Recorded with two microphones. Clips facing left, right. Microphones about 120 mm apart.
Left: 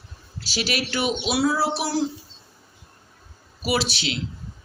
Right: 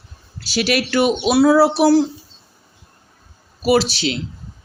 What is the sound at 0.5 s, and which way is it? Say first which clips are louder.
Speech: right 8 dB; 60° right (ahead or behind).